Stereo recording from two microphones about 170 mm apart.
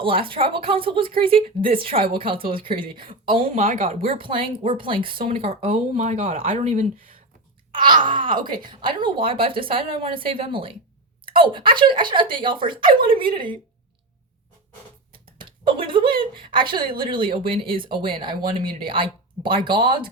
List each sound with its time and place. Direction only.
0.0 s speech: 30° right (ahead or behind)
5.6 s speech: 45° right (ahead or behind)
7.7 s wail: 30° right (ahead or behind)
8.0 s speech: 30° right (ahead or behind)
15.4 s a sound: 30° right (ahead or behind)
16.3 s speech: 30° right (ahead or behind)
16.8 s speech: 55° right (ahead or behind)
17.1 s speech: 30° right (ahead or behind)